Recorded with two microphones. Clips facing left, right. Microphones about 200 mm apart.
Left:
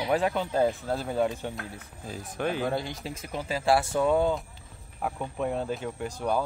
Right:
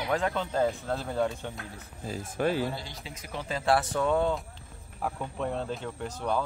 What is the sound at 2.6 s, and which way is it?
Speech, 55° left (ahead or behind).